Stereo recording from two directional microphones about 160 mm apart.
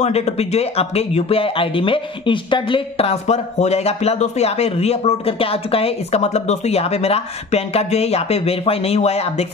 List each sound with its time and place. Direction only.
0.0 s speech: 40° left (ahead or behind)